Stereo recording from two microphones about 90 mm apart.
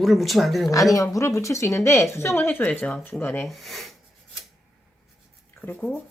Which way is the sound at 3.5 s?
Centre (ahead or behind).